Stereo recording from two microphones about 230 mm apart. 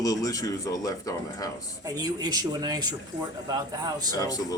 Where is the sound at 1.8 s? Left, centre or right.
Centre.